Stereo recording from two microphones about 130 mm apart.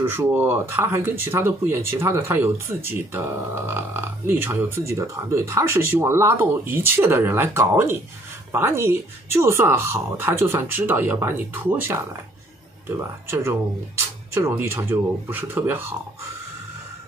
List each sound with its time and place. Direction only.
0.0 s speech: 15° right (ahead or behind)